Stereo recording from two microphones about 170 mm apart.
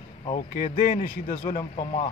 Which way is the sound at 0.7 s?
50° left (ahead or behind).